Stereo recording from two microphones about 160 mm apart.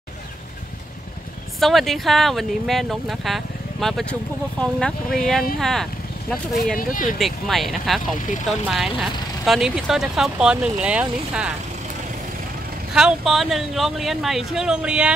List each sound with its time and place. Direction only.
1.6 s speech: centre (ahead or behind)
6.8 s speech: 55° left (ahead or behind)
7.2 s speech: centre (ahead or behind)
12.9 s speech: centre (ahead or behind)